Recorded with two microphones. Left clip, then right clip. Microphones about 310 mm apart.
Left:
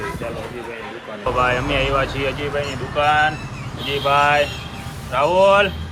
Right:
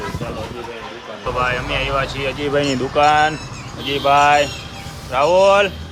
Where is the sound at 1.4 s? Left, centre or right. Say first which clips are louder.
Left 1 dB; centre.